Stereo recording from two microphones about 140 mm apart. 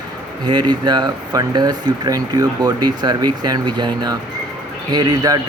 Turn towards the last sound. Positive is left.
turn(degrees=-30)  # may be behind; listen again after turning